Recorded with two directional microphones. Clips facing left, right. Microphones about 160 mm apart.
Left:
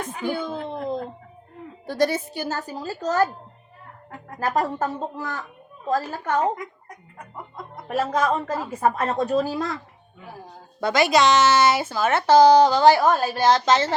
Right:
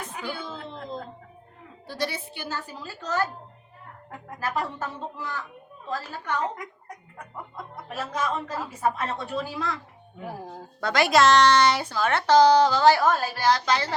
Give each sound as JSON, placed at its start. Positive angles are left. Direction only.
{"t": 0.2, "sound": "speech", "side_deg": 50}
{"t": 1.9, "sound": "a woman's voice", "side_deg": 45}
{"t": 4.4, "sound": "a woman's voice", "side_deg": 45}
{"t": 7.9, "sound": "a woman's voice", "side_deg": 50}
{"t": 10.9, "sound": "speech", "side_deg": 0}